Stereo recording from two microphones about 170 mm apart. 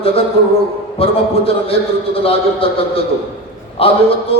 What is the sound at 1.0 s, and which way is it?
Speech, 35° left (ahead or behind).